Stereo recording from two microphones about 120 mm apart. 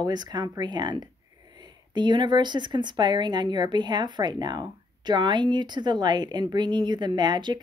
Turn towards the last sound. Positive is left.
turn(degrees=-40)  # may be behind; listen again after turning